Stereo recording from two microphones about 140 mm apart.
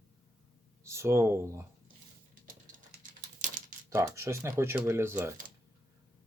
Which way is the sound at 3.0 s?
65° right (ahead or behind).